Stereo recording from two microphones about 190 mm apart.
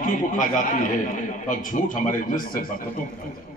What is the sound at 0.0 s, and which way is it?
A man's voice, 45° left (ahead or behind).